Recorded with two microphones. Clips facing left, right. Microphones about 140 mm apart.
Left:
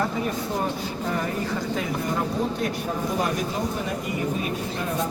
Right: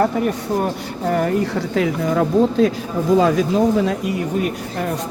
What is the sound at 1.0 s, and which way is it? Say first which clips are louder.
Speech: right 10 dB; 65° right (ahead or behind).